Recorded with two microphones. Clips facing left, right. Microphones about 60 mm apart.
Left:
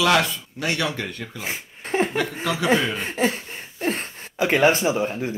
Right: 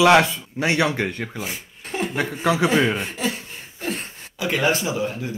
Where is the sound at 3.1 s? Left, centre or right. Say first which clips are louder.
Left 4 dB; left.